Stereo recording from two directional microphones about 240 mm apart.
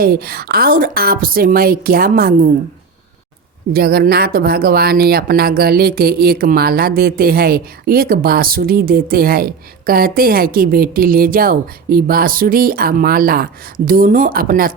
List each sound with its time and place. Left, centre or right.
0.0 s a woman's voice: right
3.7 s a woman's voice: right